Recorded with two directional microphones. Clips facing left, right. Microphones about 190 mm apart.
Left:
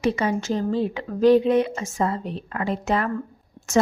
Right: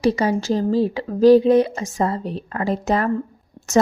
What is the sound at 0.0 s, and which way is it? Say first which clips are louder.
A woman's voice: right 4 dB; 35° right (ahead or behind).